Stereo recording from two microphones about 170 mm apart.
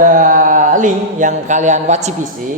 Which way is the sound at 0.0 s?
50° right (ahead or behind).